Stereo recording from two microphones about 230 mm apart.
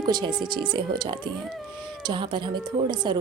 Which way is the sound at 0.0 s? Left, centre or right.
Centre.